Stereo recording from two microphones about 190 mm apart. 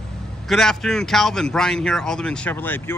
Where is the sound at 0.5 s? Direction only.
Centre (ahead or behind).